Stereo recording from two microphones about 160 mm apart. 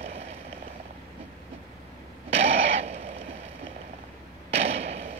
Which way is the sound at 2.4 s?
40° right (ahead or behind).